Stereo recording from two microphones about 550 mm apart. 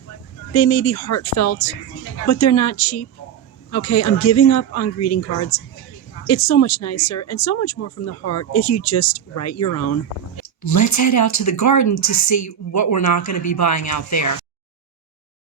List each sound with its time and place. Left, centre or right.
0.5 s speech: left